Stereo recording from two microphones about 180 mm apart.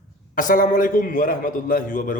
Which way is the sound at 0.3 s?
50° left (ahead or behind).